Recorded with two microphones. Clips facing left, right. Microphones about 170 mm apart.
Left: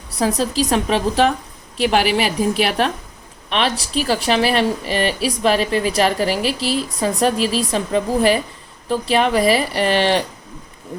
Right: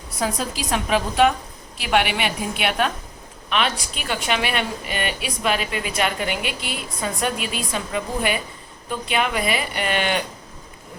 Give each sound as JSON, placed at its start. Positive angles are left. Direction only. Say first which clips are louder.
{"t": 0.2, "sound": "a woman's voice", "louder": "left 7 dB", "side_deg": 35}